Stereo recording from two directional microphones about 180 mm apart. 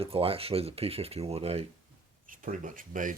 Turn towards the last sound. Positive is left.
turn(degrees=-45)  # may be behind; listen again after turning